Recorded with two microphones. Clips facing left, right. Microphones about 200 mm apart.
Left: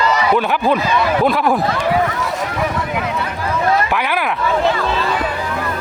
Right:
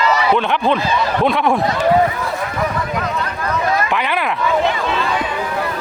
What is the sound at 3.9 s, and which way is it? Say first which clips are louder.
Speech: even; 5° left (ahead or behind).